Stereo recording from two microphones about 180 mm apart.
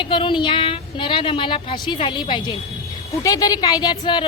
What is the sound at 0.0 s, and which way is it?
A woman's voice, 25° left (ahead or behind).